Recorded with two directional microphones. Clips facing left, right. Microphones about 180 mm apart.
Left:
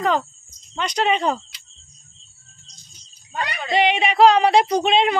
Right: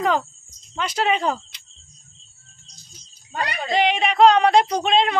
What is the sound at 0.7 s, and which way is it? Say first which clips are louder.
Speech: left 1 dB; 5° right (ahead or behind).